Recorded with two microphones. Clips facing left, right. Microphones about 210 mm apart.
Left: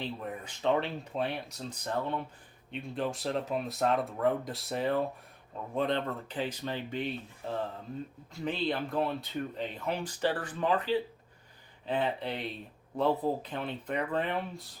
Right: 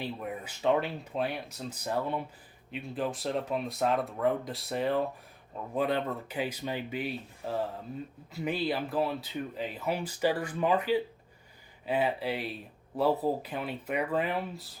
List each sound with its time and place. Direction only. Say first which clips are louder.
0.0 s speech: right 1 dB; 10° right (ahead or behind)